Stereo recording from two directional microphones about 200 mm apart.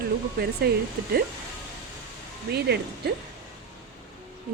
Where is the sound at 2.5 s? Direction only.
55° right (ahead or behind).